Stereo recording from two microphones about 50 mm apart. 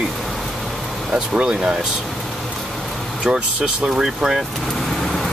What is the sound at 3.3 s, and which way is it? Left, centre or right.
Speech, centre.